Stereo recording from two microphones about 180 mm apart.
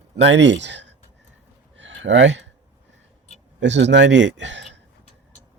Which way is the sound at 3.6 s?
80° right.